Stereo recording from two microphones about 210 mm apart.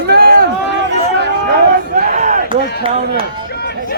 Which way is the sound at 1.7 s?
45° right (ahead or behind).